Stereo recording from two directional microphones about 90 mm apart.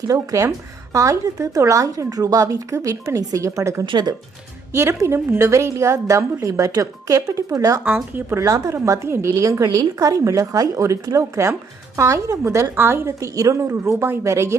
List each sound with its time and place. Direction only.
0.1 s a woman's voice: 40° right (ahead or behind)
3.8 s speech: 55° right (ahead or behind)
4.7 s a woman's voice: 30° right (ahead or behind)